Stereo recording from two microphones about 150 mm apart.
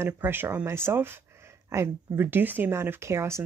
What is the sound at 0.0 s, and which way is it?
Speech, 15° right (ahead or behind).